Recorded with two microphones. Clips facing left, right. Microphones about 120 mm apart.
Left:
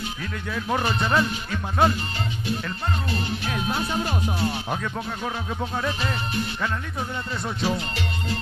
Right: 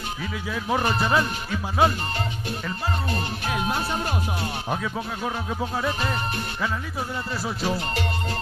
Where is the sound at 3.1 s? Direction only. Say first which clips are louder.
Even; 45° right (ahead or behind).